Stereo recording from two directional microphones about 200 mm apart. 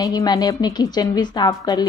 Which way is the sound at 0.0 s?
20° left (ahead or behind).